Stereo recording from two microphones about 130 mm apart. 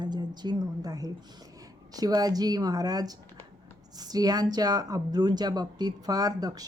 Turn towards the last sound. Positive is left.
turn(degrees=-30)  # may be behind; listen again after turning